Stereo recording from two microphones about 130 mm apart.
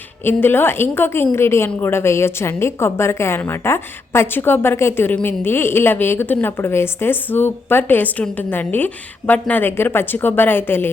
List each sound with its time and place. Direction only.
0.3 s a woman's voice: 15° left (ahead or behind)